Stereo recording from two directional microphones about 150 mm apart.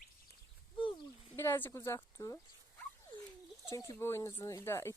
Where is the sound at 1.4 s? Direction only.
15° left (ahead or behind).